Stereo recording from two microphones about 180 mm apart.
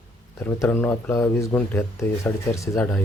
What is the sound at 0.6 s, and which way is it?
Speech, 10° left (ahead or behind).